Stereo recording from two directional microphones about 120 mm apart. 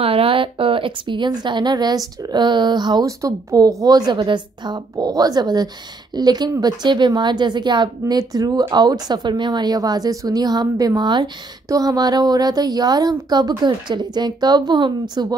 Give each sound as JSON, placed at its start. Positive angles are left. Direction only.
{"t": 0.0, "sound": "speech", "side_deg": -50}